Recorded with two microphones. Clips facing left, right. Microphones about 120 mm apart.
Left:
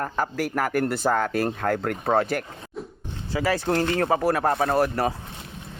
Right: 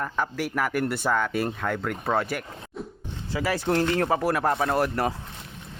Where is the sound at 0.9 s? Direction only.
35° left (ahead or behind).